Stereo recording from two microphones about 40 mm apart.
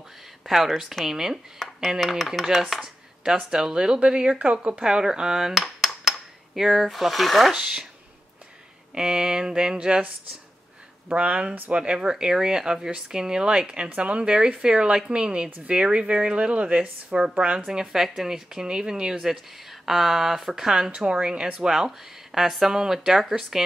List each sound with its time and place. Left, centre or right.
0.5 s a woman's voice: centre
5.5 s dishes: centre
7.5 s a woman's voice: centre
8.9 s a woman's voice: centre
11.1 s speech: right
11.7 s a woman's voice: right
17.6 s a woman's voice: centre
19.9 s a woman's voice: centre